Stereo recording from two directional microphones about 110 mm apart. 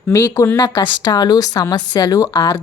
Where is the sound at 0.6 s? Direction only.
40° left (ahead or behind).